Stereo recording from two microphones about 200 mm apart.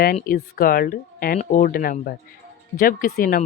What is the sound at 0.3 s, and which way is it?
Speech, 45° left (ahead or behind).